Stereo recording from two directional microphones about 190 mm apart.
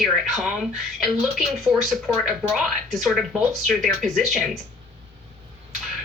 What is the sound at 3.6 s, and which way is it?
Speech, centre (ahead or behind).